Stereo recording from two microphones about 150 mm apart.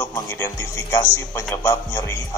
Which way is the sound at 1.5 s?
20° left (ahead or behind).